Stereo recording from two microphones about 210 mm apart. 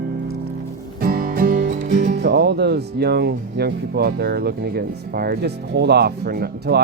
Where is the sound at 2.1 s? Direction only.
50° right (ahead or behind).